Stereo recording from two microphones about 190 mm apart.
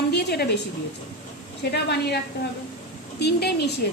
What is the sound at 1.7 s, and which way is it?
Speech, 60° left (ahead or behind).